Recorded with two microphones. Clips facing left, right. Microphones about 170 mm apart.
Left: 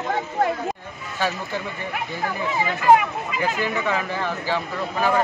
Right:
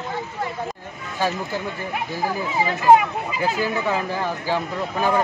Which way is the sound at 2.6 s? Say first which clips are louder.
Right 2 dB; 30° right (ahead or behind).